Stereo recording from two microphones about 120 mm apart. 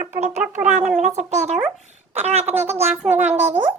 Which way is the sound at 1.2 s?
75° right (ahead or behind).